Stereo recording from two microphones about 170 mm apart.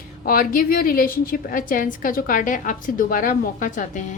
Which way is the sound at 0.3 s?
55° left (ahead or behind).